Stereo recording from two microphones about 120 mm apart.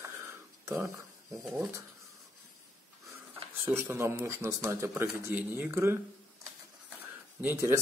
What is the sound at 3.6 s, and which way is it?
A man's voice, 20° right (ahead or behind).